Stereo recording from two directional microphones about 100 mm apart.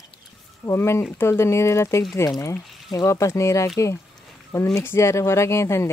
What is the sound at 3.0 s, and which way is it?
Speech, 30° left (ahead or behind).